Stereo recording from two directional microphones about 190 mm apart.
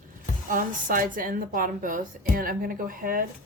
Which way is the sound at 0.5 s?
45° right (ahead or behind).